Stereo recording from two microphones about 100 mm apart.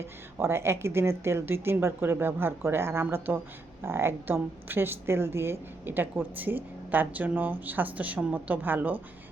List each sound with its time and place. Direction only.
0.3 s a woman's voice: 25° right (ahead or behind)